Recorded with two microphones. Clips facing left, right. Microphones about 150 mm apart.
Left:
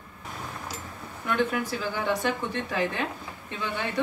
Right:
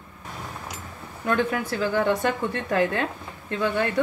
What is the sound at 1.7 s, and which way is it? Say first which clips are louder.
A woman's voice: right 6 dB; 55° right (ahead or behind).